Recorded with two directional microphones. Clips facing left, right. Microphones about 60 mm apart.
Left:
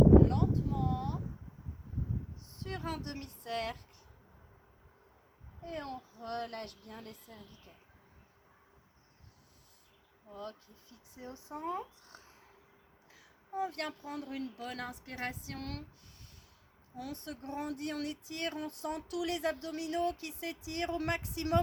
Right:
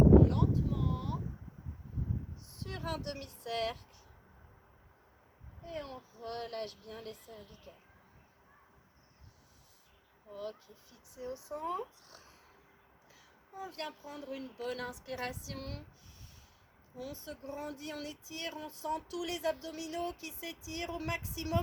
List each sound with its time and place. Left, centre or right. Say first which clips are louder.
0.3 s a sound: even; left
2.6 s speech: even; left
5.6 s a child's voice: left 2 dB; left
11.1 s a child's voice: right 4 dB; left
13.6 s speech: left 5 dB; left
14.7 s a child's voice: right 3 dB; left
17.0 s speech: left 1 dB; left